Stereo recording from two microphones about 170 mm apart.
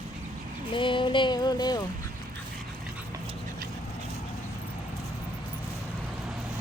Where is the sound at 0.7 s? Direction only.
30° left (ahead or behind).